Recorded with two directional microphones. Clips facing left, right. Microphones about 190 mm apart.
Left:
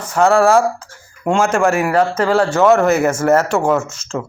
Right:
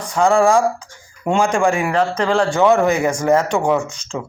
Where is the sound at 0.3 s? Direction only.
5° left (ahead or behind).